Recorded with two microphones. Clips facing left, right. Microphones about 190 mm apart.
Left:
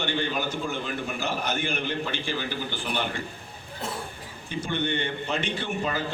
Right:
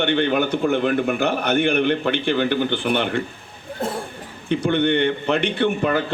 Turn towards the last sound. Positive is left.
turn(degrees=-60)  # may be behind; listen again after turning